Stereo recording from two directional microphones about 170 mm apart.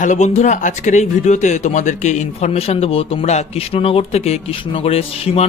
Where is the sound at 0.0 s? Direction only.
45° left (ahead or behind).